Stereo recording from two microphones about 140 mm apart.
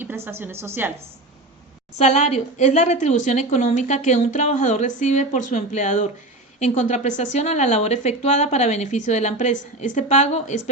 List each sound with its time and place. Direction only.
0.3 s a woman's voice: 15° right (ahead or behind)
2.0 s a woman's voice: 55° left (ahead or behind)